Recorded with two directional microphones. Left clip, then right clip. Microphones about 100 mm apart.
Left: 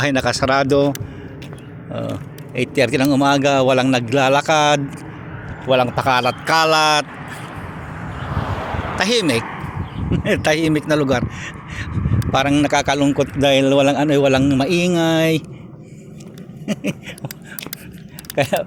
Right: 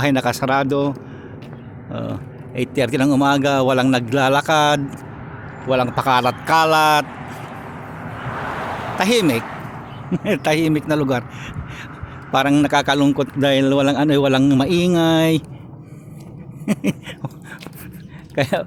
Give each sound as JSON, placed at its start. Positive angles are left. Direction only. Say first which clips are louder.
{"t": 0.0, "sound": "speech", "louder": "left 1 dB", "side_deg": -10}
{"t": 1.9, "sound": "a man's voice", "louder": "left 2 dB", "side_deg": -15}
{"t": 6.7, "sound": "speech", "louder": "even", "side_deg": -15}
{"t": 7.2, "sound": "a sound", "louder": "left 1 dB", "side_deg": 0}
{"t": 8.1, "sound": "vehicle", "louder": "even", "side_deg": 10}
{"t": 9.0, "sound": "speech", "louder": "even", "side_deg": -25}
{"t": 9.5, "sound": "a sound", "louder": "left 2 dB", "side_deg": -5}
{"t": 10.2, "sound": "a man's voice", "louder": "left 1 dB", "side_deg": -30}
{"t": 16.6, "sound": "a sound", "louder": "right 2 dB", "side_deg": -65}
{"t": 18.3, "sound": "speech", "louder": "left 1 dB", "side_deg": -50}